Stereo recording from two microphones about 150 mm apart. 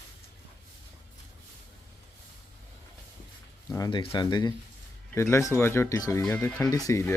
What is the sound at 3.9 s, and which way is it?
Speech, 30° left (ahead or behind).